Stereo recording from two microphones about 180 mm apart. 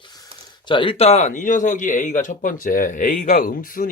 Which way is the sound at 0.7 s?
30° left (ahead or behind).